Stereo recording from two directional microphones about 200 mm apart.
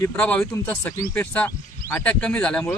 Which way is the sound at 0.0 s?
5° left (ahead or behind).